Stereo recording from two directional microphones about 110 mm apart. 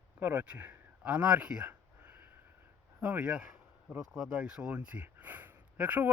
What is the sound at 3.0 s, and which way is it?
Speech, 10° right (ahead or behind).